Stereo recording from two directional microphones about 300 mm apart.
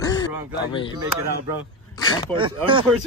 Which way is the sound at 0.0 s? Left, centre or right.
Centre.